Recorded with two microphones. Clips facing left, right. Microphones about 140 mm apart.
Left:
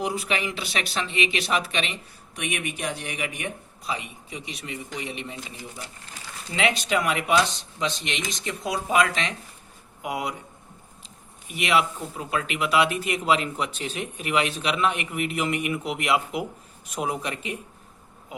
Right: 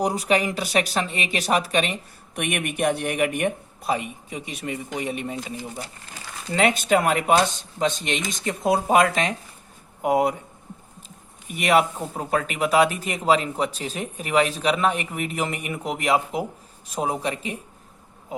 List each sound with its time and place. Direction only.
0.0 s speech: 40° right (ahead or behind)
11.5 s speech: 45° right (ahead or behind)